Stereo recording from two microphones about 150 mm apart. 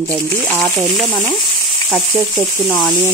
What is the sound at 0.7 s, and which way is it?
Speech, centre (ahead or behind).